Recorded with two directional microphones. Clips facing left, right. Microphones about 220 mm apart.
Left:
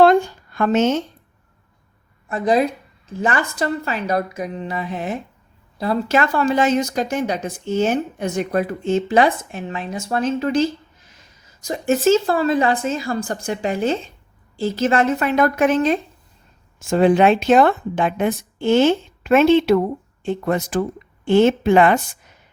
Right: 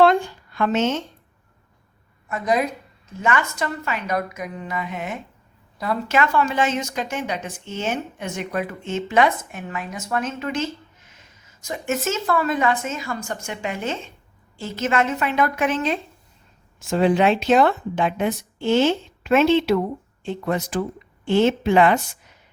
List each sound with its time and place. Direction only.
0.0 s speech: 45° left (ahead or behind)
2.3 s a woman's voice: 30° left (ahead or behind); by 22.4 s 50° left (ahead or behind)